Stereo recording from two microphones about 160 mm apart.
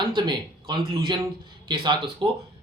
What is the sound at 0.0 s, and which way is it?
Speech, 30° right (ahead or behind).